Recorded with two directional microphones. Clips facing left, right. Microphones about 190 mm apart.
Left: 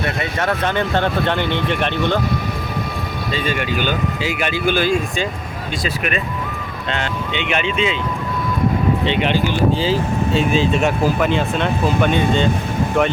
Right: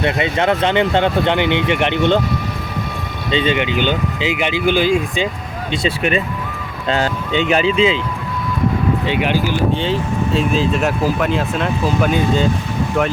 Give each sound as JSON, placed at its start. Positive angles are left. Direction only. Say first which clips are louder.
{"t": 0.0, "sound": "speech", "louder": "right 4 dB", "side_deg": -20}
{"t": 3.3, "sound": "speech", "louder": "right 5 dB", "side_deg": -20}
{"t": 5.8, "sound": "speech", "louder": "right 5 dB", "side_deg": -30}
{"t": 9.0, "sound": "speech", "louder": "even", "side_deg": -10}